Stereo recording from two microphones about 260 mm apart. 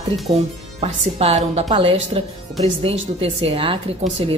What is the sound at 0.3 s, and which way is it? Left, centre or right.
A woman's voice, centre.